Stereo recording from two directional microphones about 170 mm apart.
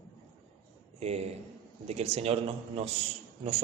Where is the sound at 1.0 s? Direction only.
40° right (ahead or behind).